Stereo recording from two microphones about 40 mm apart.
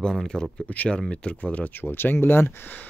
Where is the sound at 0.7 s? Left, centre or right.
Left.